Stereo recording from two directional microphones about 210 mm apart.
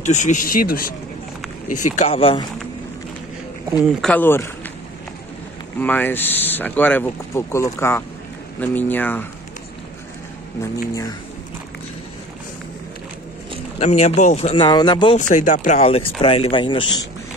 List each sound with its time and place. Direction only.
0.0 s speech: 35° left (ahead or behind)
1.7 s speech: 90° left
2.0 s speech: 30° left (ahead or behind)
3.8 s speech: 5° left (ahead or behind)
5.8 s speech: 10° left (ahead or behind)
13.7 s speech: 30° left (ahead or behind)
15.1 s speech: 35° left (ahead or behind)